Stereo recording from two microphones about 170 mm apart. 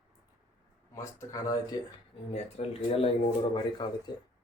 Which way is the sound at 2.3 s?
35° left (ahead or behind).